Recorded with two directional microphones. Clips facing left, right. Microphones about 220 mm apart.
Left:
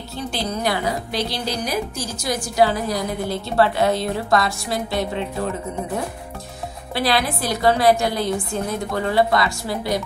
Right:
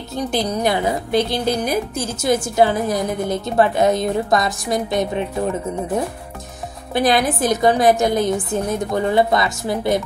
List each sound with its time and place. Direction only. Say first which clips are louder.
0.4 s a woman's voice: right 3 dB; 20° right (ahead or behind)
1.1 s a woman's voice: right 6 dB; 55° right (ahead or behind)
2.0 s a woman's voice: right 6 dB; 25° right (ahead or behind)
7.0 s a woman's voice: right 5 dB; 20° right (ahead or behind)